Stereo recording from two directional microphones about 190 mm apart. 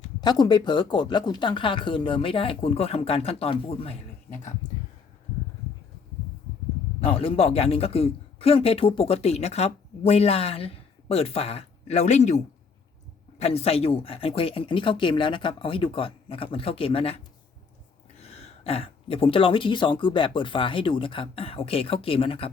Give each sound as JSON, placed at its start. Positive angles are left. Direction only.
{"t": 0.2, "sound": "speech", "side_deg": 20}
{"t": 7.0, "sound": "a man's voice", "side_deg": 30}
{"t": 13.4, "sound": "speech", "side_deg": 30}
{"t": 18.2, "sound": "speech", "side_deg": 35}